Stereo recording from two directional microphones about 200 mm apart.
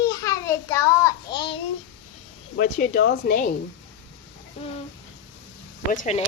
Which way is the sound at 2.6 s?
45° left (ahead or behind).